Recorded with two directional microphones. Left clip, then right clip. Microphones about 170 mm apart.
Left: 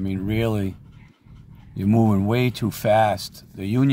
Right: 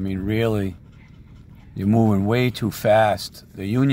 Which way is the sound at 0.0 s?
15° left (ahead or behind).